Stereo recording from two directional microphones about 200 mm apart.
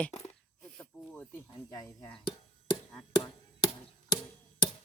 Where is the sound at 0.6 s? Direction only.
5° left (ahead or behind); by 2.7 s 25° left (ahead or behind).